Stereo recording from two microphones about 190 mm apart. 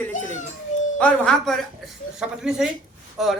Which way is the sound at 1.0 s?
5° left (ahead or behind).